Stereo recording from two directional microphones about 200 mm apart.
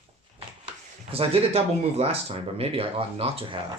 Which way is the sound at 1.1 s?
30° right (ahead or behind).